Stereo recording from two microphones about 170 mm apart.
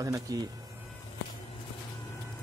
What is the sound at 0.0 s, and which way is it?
Speech, 20° right (ahead or behind).